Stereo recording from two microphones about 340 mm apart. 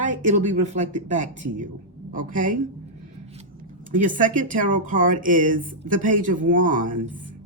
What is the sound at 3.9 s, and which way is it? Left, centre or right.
Speech, right.